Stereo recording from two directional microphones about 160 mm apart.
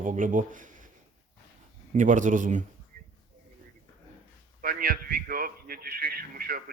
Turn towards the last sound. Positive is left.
turn(degrees=-65)  # may be behind; listen again after turning